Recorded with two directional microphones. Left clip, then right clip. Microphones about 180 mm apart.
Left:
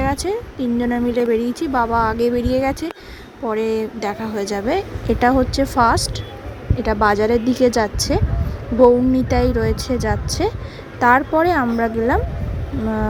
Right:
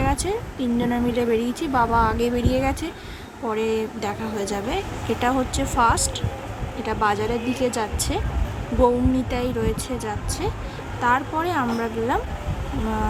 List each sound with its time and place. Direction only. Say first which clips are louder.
0.0 s speech: left 3 dB; 35° left (ahead or behind)